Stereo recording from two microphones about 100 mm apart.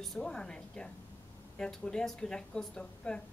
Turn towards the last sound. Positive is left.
turn(degrees=10)  # may be behind; listen again after turning